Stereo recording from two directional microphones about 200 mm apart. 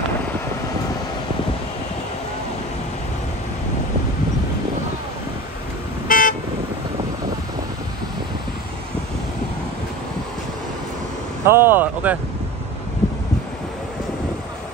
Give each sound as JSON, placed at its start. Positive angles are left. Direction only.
{"t": 6.0, "sound": "vehicle", "side_deg": 40}
{"t": 11.4, "sound": "speech", "side_deg": -10}